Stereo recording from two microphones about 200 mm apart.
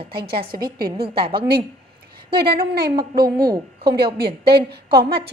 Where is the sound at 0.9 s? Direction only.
25° right (ahead or behind).